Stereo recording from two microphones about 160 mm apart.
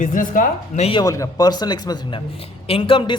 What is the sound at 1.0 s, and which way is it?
A man's voice, 20° left (ahead or behind).